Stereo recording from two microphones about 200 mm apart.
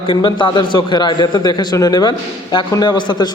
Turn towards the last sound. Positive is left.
turn(degrees=20)  # may be behind; listen again after turning